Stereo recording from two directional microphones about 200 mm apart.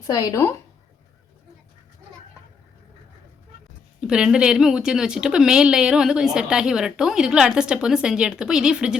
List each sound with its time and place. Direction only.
0.1 s speech: 20° left (ahead or behind)
4.0 s speech: 5° right (ahead or behind)